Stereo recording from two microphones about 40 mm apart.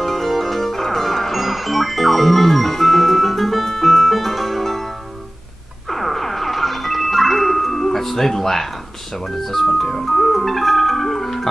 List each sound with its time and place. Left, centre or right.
0.0 s music: centre
5.9 s music: centre